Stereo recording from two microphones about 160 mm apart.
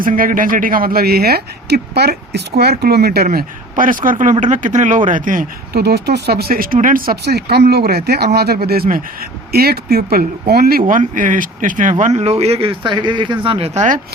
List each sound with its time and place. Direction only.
0.0 s speech: 60° right (ahead or behind)